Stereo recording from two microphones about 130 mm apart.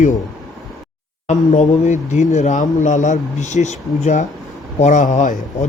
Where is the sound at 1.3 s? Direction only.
65° left (ahead or behind).